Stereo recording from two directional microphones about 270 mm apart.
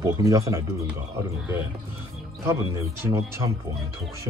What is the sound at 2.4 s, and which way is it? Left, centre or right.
Speech, centre.